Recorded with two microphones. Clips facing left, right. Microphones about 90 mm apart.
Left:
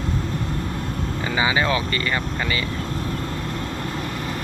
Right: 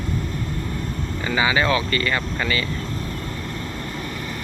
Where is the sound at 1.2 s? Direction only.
25° left (ahead or behind).